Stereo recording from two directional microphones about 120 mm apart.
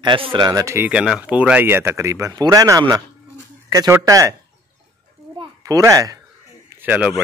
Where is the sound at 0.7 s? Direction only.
10° right (ahead or behind); by 4.4 s 25° right (ahead or behind).